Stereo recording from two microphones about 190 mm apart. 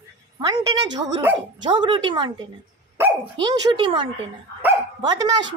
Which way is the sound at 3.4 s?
25° right (ahead or behind).